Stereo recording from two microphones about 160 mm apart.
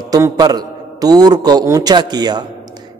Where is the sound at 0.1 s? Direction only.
25° right (ahead or behind).